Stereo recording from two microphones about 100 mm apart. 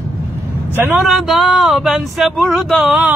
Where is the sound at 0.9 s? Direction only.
Centre (ahead or behind).